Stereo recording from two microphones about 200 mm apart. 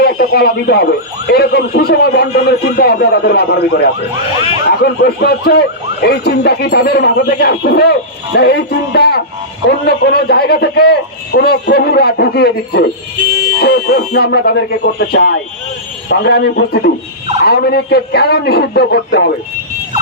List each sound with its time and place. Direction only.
0.0 s speech: 50° left (ahead or behind)